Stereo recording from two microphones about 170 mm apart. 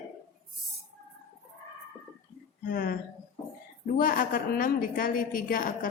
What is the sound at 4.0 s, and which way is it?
A woman's voice, 55° left (ahead or behind).